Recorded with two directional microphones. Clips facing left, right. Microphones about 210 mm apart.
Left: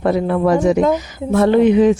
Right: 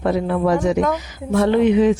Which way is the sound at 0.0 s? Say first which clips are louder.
Left 3 dB; 50° left (ahead or behind).